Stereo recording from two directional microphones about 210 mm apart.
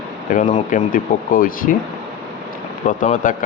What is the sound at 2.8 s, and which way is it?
Speech, 35° left (ahead or behind).